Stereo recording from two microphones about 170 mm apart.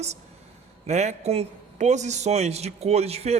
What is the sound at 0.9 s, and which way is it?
A man's voice, 40° right (ahead or behind).